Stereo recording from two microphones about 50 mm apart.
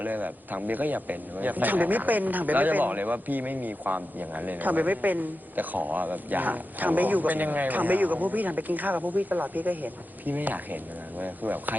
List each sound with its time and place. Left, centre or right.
0.0 s speech: right